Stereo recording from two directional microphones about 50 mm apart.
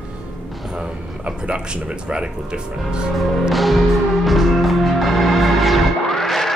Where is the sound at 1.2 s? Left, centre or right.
Centre.